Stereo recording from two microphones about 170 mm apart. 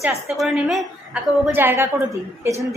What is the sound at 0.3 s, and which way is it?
A woman's voice, centre (ahead or behind).